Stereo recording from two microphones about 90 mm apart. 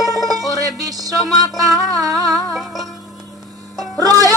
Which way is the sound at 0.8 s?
40° right (ahead or behind).